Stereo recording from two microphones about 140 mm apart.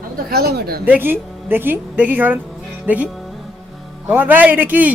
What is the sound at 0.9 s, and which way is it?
Speech, 15° right (ahead or behind).